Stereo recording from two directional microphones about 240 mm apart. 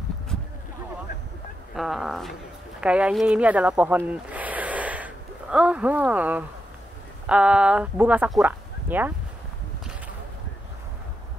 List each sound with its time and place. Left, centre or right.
1.8 s speech: centre